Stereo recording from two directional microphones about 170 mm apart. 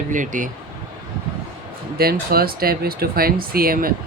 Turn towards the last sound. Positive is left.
turn(degrees=-60)  # may be behind; listen again after turning